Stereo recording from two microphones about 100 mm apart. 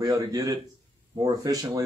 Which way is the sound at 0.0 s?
40° right (ahead or behind).